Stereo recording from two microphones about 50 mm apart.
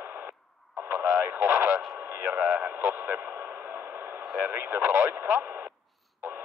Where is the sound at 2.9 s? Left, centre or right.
Right.